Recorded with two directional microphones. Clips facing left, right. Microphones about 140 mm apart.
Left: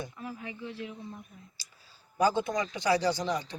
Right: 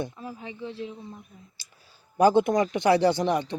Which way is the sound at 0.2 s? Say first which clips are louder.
Right 3 dB; 25° right (ahead or behind).